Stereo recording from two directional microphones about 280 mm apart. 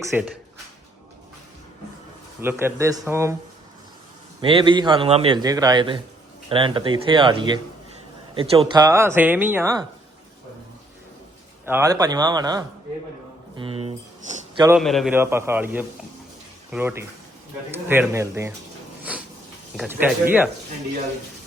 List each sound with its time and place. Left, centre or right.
0.1 s a man's voice: centre
2.4 s a man's voice: centre
4.4 s a man's voice: centre
11.6 s a man's voice: centre
14.8 s a man's voice: centre
19.7 s speech: centre